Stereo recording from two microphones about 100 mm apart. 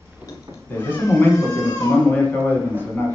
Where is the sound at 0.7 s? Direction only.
20° left (ahead or behind).